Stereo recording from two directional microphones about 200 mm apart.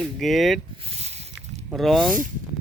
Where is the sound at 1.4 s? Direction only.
Centre (ahead or behind).